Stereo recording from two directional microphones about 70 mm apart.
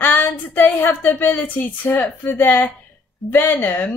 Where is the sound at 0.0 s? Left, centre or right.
Left.